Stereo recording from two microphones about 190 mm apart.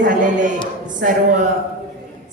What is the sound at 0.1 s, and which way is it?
A man's voice, 40° right (ahead or behind).